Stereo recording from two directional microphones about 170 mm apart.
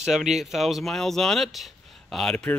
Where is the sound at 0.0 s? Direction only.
5° right (ahead or behind).